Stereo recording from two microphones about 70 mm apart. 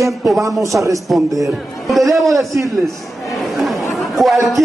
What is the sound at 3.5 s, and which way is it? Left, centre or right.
Chatter, centre.